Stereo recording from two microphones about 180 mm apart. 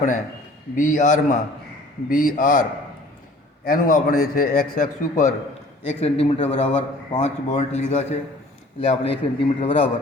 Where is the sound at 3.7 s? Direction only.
50° left (ahead or behind).